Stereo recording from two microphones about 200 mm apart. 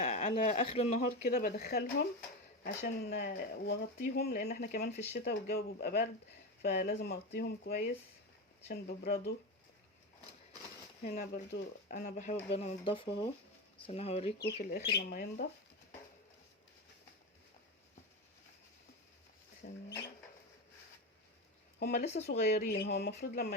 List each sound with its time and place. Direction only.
0.0 s speech: 35° left (ahead or behind)
1.3 s speech: 50° left (ahead or behind)
11.0 s speech: 50° left (ahead or behind)
12.1 s speech: 35° left (ahead or behind)
14.6 s speech: 50° left (ahead or behind)
19.6 s speech: 55° left (ahead or behind)
21.8 s speech: 55° left (ahead or behind)